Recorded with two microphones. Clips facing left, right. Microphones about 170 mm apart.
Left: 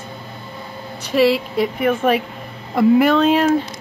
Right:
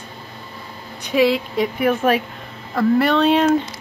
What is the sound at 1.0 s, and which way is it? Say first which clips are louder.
Speech: left 1 dB; centre (ahead or behind).